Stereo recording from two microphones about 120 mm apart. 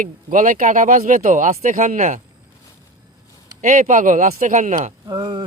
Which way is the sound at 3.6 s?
90° right.